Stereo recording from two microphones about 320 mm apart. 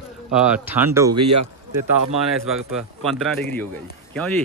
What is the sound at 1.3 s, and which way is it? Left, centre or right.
Speech, right.